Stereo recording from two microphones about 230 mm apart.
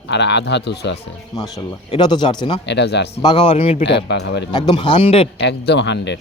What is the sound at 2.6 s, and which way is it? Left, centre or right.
Speech, left.